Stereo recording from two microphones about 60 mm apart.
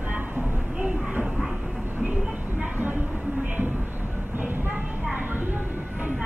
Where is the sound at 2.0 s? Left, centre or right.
Right.